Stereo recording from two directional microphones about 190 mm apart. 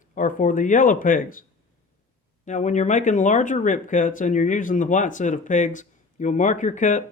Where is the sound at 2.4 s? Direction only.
40° left (ahead or behind).